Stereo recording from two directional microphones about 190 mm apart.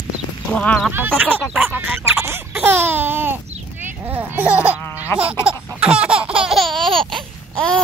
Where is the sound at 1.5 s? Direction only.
10° right (ahead or behind).